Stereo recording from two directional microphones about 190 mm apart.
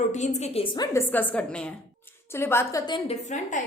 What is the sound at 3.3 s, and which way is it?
Speech, 40° left (ahead or behind).